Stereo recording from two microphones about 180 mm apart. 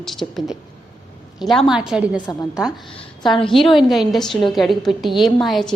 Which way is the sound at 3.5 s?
Centre (ahead or behind).